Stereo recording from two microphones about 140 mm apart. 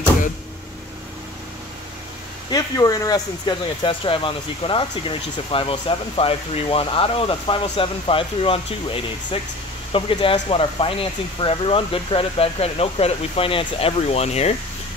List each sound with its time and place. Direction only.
2.5 s speech: 25° left (ahead or behind); by 14.5 s 50° left (ahead or behind)